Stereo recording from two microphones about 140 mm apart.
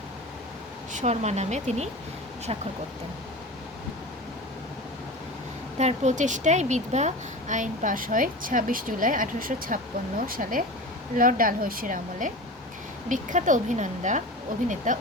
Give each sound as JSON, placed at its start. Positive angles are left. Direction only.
{"t": 1.0, "sound": "speech", "side_deg": -50}
{"t": 5.7, "sound": "speech", "side_deg": -55}
{"t": 13.1, "sound": "speech", "side_deg": -65}